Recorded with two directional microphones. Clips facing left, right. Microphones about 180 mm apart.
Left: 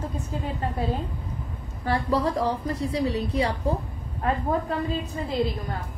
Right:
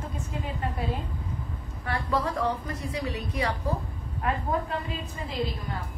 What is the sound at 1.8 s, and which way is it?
A woman's voice, 35° left (ahead or behind).